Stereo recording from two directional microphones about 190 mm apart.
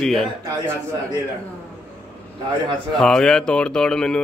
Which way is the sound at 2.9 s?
5° left (ahead or behind).